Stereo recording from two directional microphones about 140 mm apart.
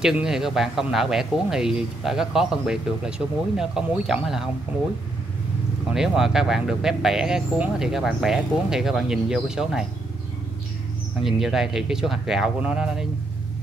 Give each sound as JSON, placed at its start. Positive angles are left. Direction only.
{"t": 0.0, "sound": "speech", "side_deg": -5}
{"t": 5.9, "sound": "speech", "side_deg": -5}
{"t": 11.2, "sound": "speech", "side_deg": -5}